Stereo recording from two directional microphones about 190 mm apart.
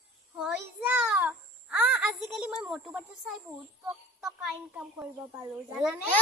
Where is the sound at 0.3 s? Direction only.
5° right (ahead or behind).